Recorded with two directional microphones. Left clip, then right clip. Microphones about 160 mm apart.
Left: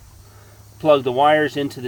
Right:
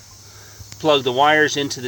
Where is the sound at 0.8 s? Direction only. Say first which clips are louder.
Left 1 dB; 20° left (ahead or behind).